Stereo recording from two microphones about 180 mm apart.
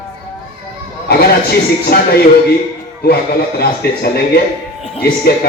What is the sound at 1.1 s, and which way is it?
Speech, 60° left (ahead or behind).